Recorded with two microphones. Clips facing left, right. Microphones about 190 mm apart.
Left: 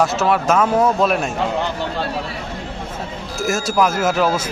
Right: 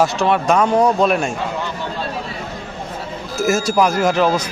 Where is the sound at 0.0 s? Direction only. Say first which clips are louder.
Right 1 dB; centre (ahead or behind).